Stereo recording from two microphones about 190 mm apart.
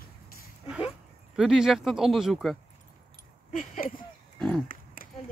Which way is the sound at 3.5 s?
45° left (ahead or behind).